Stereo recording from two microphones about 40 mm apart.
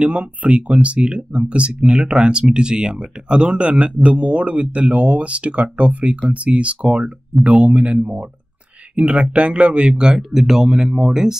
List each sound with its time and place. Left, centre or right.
0.0 s speech: right
9.9 s speech: centre